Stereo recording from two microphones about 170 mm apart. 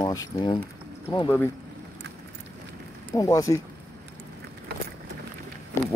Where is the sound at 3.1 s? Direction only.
20° left (ahead or behind).